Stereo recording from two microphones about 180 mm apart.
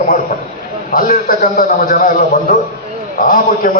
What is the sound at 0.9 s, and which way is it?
A man's voice, 50° left (ahead or behind).